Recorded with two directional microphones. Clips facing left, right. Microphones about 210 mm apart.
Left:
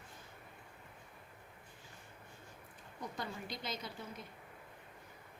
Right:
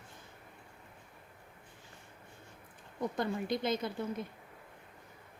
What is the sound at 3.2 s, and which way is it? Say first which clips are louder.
Speech: right 11 dB; 55° right (ahead or behind).